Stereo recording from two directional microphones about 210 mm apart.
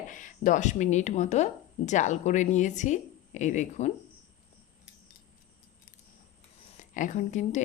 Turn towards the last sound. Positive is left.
turn(degrees=35)  # may be behind; listen again after turning